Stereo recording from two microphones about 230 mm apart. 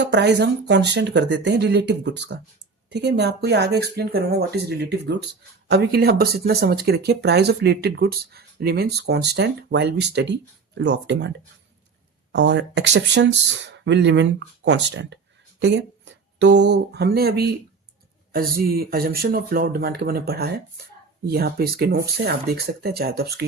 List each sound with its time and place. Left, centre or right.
0.0 s speech: right
12.3 s speech: right